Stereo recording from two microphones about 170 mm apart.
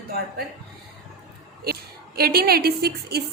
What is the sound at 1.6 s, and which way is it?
A woman's voice, 65° right (ahead or behind).